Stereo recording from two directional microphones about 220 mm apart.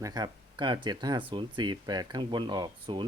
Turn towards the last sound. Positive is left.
turn(degrees=-20)  # may be behind; listen again after turning